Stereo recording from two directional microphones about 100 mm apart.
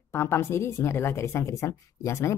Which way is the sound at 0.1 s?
25° left (ahead or behind).